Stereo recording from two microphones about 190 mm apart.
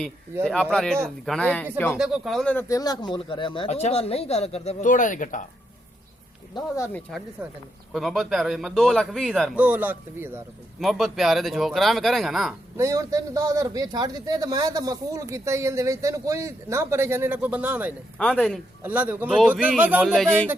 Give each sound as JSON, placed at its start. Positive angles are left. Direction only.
{"t": 0.4, "sound": "a man's voice", "side_deg": 5}
{"t": 6.7, "sound": "speech", "side_deg": 15}
{"t": 7.9, "sound": "a man's voice", "side_deg": 0}
{"t": 10.8, "sound": "a man's voice", "side_deg": 0}
{"t": 12.7, "sound": "speech", "side_deg": -15}
{"t": 18.2, "sound": "a man's voice", "side_deg": 5}
{"t": 18.8, "sound": "speech", "side_deg": -10}